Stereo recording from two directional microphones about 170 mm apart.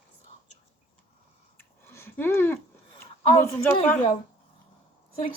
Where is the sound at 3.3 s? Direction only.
15° left (ahead or behind).